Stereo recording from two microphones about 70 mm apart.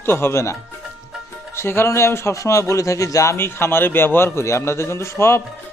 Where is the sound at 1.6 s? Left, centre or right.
Left.